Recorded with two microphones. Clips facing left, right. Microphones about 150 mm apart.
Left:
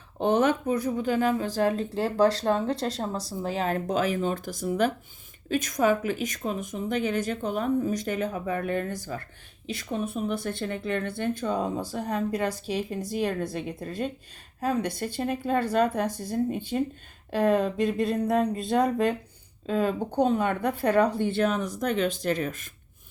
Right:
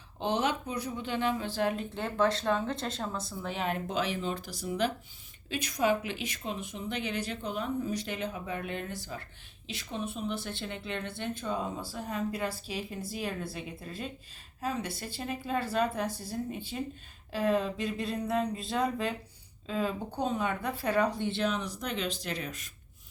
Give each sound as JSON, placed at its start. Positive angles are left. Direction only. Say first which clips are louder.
{"t": 0.2, "sound": "a woman's voice", "louder": "left 7 dB", "side_deg": 50}
{"t": 16.0, "sound": "speech", "louder": "left 5 dB", "side_deg": -10}
{"t": 16.3, "sound": "a woman's voice", "louder": "left 9 dB", "side_deg": 55}